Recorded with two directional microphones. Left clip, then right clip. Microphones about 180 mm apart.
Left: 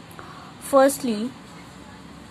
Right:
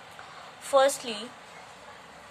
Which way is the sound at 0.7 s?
30° left (ahead or behind).